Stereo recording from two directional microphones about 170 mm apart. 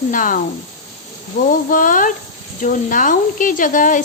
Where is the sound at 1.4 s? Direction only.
50° left (ahead or behind).